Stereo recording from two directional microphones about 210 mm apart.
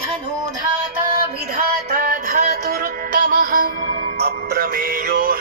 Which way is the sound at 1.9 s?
40° right (ahead or behind).